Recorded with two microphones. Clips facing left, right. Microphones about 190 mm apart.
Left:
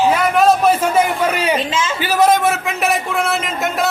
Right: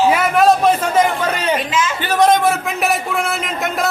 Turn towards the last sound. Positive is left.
turn(degrees=0)  # may be behind; listen again after turning